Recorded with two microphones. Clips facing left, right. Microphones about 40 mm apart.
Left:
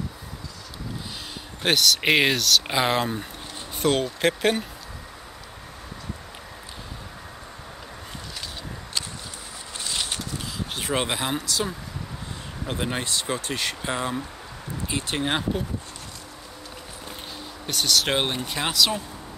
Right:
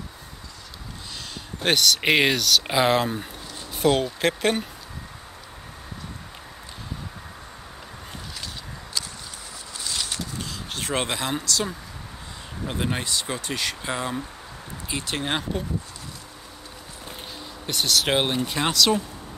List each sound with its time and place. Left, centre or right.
1.6 s speech: centre
9.8 s a sound: left
10.4 s a sound: centre
11.4 s speech: centre
12.6 s speech: centre
17.6 s speech: centre